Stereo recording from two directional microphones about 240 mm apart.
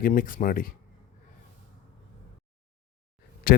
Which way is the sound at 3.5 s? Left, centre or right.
Left.